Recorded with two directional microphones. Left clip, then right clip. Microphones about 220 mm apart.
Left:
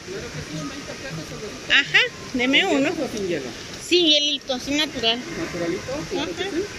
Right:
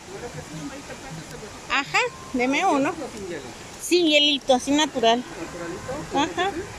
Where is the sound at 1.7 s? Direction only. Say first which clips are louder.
Left 5 dB; 5° right (ahead or behind).